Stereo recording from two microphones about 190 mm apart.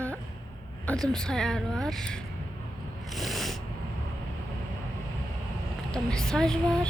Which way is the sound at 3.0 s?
Centre (ahead or behind).